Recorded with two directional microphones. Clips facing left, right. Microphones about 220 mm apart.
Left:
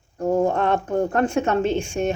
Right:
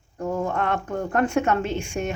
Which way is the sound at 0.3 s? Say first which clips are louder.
Left 6 dB; 30° left (ahead or behind).